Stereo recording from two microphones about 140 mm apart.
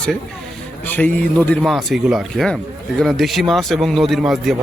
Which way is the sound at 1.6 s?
Centre (ahead or behind).